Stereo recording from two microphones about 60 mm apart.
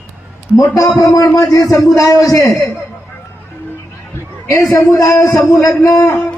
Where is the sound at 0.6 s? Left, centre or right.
Left.